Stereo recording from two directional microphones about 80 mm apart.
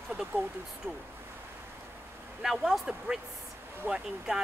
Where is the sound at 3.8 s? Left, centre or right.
Right.